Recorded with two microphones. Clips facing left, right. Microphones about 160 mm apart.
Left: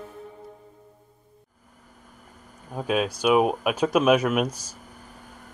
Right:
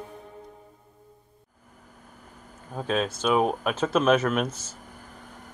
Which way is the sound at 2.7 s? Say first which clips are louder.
Left 2 dB; 10° left (ahead or behind).